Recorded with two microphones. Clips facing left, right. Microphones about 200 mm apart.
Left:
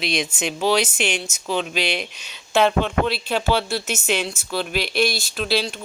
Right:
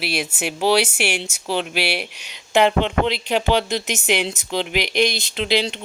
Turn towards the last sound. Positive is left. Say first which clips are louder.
# right 2 dB
turn(degrees=-20)  # may be behind; listen again after turning